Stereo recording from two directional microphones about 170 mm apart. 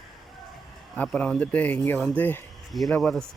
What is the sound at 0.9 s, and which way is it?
Speech, 10° left (ahead or behind).